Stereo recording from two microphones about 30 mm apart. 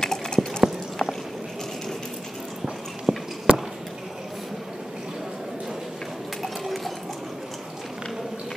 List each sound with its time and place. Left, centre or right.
0.0 s clip-clop: left
3.1 s a sound: right
3.5 s basketball bounce: right
6.4 s clip-clop: centre